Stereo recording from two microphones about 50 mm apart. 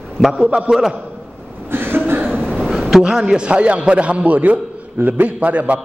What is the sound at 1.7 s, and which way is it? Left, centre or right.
Chuckle, right.